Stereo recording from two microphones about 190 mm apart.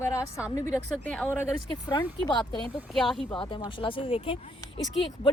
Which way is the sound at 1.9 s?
25° left (ahead or behind).